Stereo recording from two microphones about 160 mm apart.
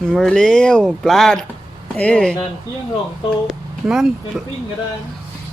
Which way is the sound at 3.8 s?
5° right (ahead or behind).